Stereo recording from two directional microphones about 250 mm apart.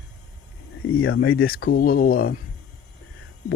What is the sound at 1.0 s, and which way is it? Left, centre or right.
Speech, left.